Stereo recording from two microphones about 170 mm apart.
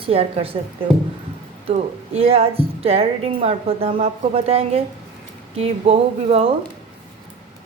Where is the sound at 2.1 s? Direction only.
35° right (ahead or behind).